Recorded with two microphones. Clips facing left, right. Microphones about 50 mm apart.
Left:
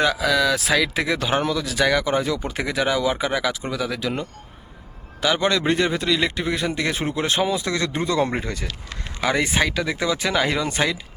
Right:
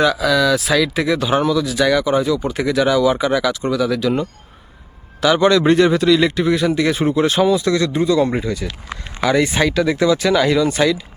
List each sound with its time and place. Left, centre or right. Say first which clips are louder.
0.0 s speech: right 4 dB; left
5.2 s a man's voice: right 7 dB; centre
7.4 s speech: right 7 dB; left
8.6 s speech: right 5 dB; right
9.2 s a man's voice: right 5 dB; centre
10.2 s speech: right 7 dB; centre